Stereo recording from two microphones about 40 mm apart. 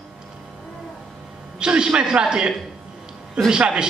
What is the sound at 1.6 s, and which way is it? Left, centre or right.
A man's voice, right.